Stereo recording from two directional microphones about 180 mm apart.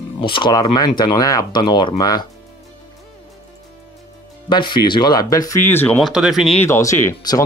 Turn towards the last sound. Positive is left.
turn(degrees=20)  # may be behind; listen again after turning